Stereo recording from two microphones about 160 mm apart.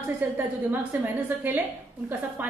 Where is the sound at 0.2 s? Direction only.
10° right (ahead or behind).